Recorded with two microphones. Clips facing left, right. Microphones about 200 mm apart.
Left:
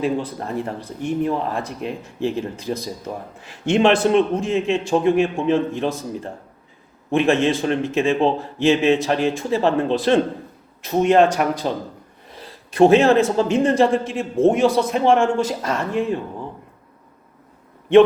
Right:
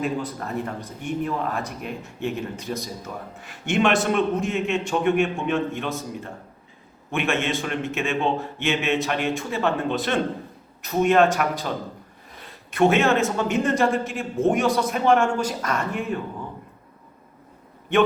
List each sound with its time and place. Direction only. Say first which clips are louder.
0.0 s speech: left 4 dB; 30° left (ahead or behind)
7.1 s a man's voice: left 7 dB; 35° left (ahead or behind)